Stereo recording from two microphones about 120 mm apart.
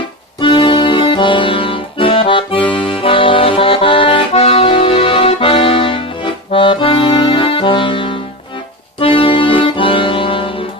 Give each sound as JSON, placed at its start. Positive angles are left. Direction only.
{"t": 0.3, "sound": "music", "side_deg": 45}
{"t": 6.5, "sound": "accordion", "side_deg": 45}